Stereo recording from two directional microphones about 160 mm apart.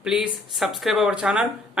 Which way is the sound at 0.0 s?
5° right (ahead or behind).